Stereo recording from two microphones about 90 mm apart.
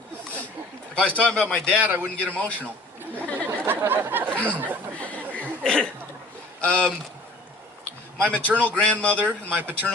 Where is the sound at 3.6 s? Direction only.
25° right (ahead or behind).